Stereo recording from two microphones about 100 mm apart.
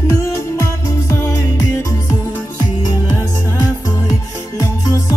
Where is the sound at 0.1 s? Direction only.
30° left (ahead or behind).